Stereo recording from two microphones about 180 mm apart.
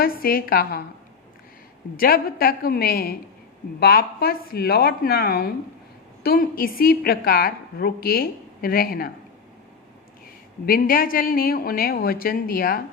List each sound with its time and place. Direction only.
0.0 s a woman's voice: 55° left (ahead or behind)
2.0 s a woman's voice: 55° left (ahead or behind)
10.7 s a woman's voice: 55° left (ahead or behind)